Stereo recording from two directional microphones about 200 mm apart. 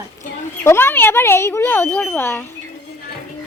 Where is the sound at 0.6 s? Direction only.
10° left (ahead or behind).